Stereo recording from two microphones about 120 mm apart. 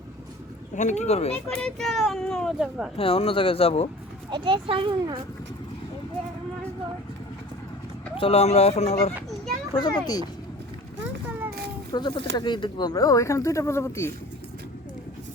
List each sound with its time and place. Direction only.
0.8 s speech: 75° left (ahead or behind)
1.5 s a child's voice: 5° left (ahead or behind)
3.0 s speech: 50° left (ahead or behind)
4.3 s speech: 40° right (ahead or behind)
8.1 s speech: 50° left (ahead or behind)
9.7 s speech: 35° left (ahead or behind)
11.9 s speech: 35° left (ahead or behind)